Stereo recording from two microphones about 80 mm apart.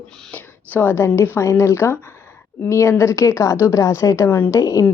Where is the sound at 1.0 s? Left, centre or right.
Left.